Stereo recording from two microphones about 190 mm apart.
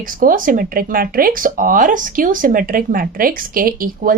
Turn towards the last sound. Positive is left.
turn(degrees=-50)  # may be behind; listen again after turning